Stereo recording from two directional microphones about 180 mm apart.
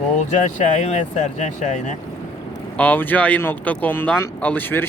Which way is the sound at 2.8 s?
10° left (ahead or behind).